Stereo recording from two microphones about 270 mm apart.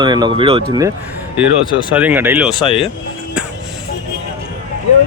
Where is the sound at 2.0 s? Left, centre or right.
Centre.